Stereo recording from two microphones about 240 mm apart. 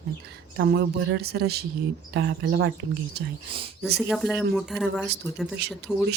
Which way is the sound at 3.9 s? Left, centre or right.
Centre.